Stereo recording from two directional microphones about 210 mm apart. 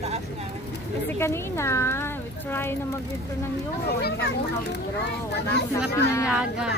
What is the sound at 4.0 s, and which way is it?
Speech, 50° left (ahead or behind).